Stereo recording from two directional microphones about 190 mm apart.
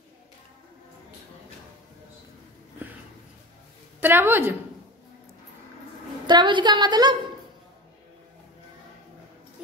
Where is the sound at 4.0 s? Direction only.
10° right (ahead or behind).